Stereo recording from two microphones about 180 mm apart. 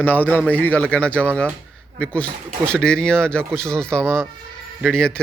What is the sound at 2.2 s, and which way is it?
Speech, 10° right (ahead or behind).